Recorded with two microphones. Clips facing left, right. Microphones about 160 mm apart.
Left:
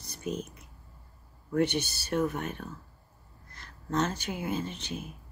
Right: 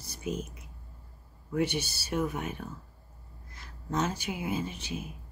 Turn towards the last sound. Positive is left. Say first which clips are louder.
# even
turn(degrees=-10)  # may be behind; listen again after turning